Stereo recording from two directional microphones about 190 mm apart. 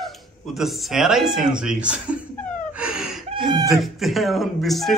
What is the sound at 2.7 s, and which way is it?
Gasp, 5° right (ahead or behind).